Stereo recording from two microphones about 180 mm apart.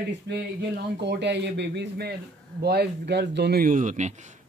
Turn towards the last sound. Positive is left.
turn(degrees=-40)  # may be behind; listen again after turning